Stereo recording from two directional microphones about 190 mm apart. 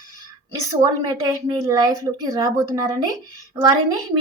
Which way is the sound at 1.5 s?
20° right (ahead or behind).